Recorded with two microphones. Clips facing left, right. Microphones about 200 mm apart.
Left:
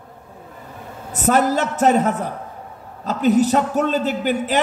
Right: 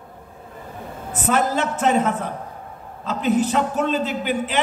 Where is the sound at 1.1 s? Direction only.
40° left (ahead or behind).